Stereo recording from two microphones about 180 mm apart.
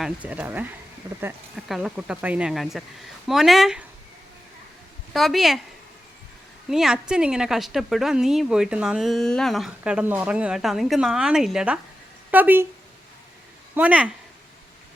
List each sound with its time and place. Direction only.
0.0 s speech: 5° right (ahead or behind)
1.5 s a woman's voice: centre (ahead or behind)
5.1 s a woman's voice: centre (ahead or behind)
6.7 s a woman's voice: centre (ahead or behind)
13.7 s speech: 5° right (ahead or behind)